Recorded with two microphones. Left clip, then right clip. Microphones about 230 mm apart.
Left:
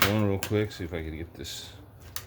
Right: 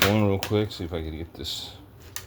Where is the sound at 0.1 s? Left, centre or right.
Centre.